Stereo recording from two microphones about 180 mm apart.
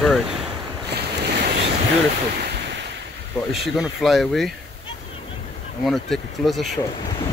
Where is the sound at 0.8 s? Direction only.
65° right (ahead or behind).